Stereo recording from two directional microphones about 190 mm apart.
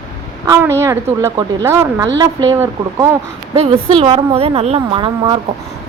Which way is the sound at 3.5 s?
30° right (ahead or behind).